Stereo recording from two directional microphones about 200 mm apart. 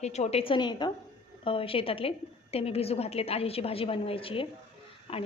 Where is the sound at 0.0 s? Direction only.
35° left (ahead or behind).